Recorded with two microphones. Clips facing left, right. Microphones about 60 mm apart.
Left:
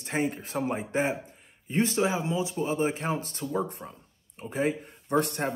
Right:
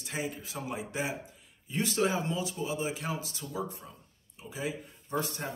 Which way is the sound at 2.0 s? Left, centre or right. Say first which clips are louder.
Left 3 dB; centre.